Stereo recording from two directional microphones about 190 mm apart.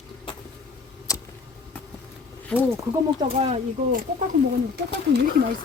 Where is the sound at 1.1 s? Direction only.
15° left (ahead or behind).